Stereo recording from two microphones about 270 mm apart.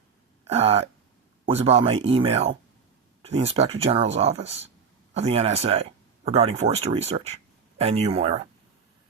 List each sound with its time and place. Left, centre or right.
0.4 s speech: right